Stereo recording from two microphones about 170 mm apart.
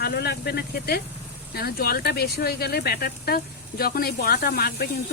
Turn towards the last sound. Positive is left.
turn(degrees=65)  # may be behind; listen again after turning